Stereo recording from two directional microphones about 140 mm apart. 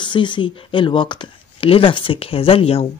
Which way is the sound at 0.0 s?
35° left (ahead or behind).